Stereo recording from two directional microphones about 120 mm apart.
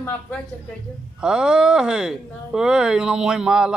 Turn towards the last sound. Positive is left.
turn(degrees=-5)  # may be behind; listen again after turning